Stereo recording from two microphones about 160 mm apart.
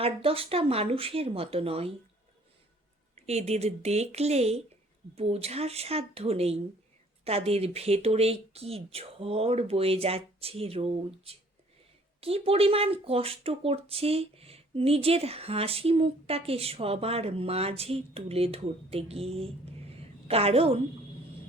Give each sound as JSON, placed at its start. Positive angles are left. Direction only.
{"t": 0.0, "sound": "speech", "side_deg": -35}
{"t": 3.2, "sound": "speech", "side_deg": -40}